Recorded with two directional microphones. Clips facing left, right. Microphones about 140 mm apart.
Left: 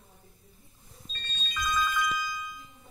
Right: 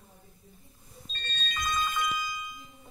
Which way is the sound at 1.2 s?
65° right (ahead or behind).